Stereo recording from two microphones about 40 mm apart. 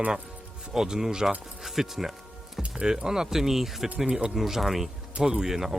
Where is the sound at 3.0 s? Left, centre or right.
Centre.